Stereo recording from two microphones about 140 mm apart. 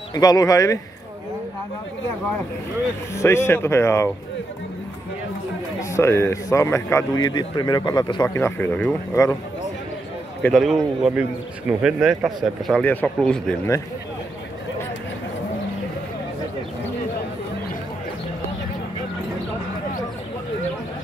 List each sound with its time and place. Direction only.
0.1 s a man's voice: 25° left (ahead or behind)
3.2 s a man's voice: 20° left (ahead or behind)
5.8 s a man's voice: 20° left (ahead or behind)
10.4 s a man's voice: centre (ahead or behind)
12.6 s speech: 10° left (ahead or behind)